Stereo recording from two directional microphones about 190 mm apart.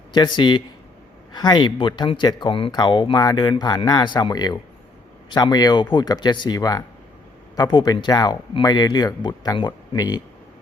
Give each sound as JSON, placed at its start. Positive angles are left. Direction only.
{"t": 0.1, "sound": "speech", "side_deg": 25}